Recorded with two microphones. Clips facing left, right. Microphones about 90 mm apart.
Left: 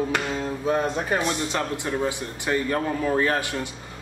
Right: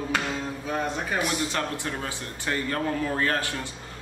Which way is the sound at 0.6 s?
30° left (ahead or behind).